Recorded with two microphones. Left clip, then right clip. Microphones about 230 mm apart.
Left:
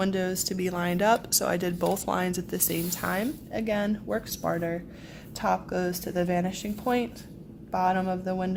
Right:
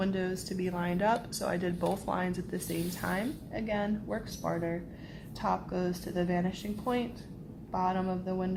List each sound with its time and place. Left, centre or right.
0.0 s speech: left